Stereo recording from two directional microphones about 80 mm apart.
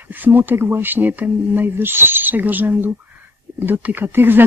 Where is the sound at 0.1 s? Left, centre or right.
Right.